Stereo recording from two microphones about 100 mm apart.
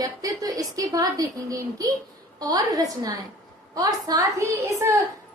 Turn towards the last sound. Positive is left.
turn(degrees=-30)  # may be behind; listen again after turning